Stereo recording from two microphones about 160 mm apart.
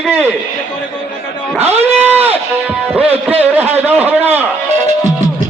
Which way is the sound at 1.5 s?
15° right (ahead or behind).